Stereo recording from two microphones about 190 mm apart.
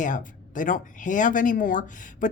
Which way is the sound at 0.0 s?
45° left (ahead or behind).